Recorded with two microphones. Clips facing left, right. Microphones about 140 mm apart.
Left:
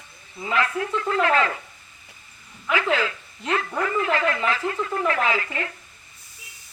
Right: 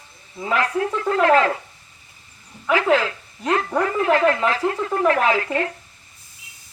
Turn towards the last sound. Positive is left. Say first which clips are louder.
# right 5 dB
turn(degrees=-40)  # may be behind; listen again after turning